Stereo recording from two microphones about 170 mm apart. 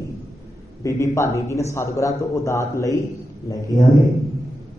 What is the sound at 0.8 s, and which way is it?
A man's voice, 15° left (ahead or behind).